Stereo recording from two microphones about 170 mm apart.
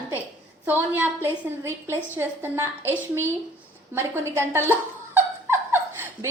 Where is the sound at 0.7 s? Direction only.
10° right (ahead or behind).